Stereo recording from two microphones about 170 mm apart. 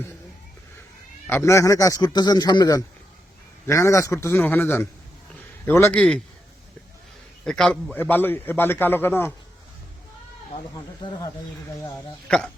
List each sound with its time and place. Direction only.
1.3 s a man's voice: 15° left (ahead or behind)
7.4 s a man's voice: 5° left (ahead or behind)
10.8 s a man's voice: 25° left (ahead or behind)